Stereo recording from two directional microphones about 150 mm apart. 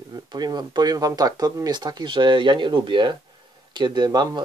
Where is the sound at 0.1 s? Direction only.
25° right (ahead or behind).